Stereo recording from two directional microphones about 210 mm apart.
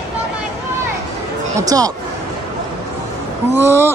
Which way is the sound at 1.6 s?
15° right (ahead or behind).